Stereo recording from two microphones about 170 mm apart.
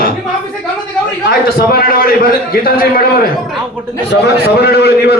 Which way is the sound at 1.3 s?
65° left (ahead or behind).